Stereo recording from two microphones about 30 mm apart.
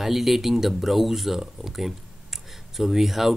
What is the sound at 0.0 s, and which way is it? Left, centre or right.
Speech, centre.